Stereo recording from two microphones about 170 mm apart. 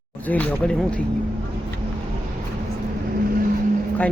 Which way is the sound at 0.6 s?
5° left (ahead or behind).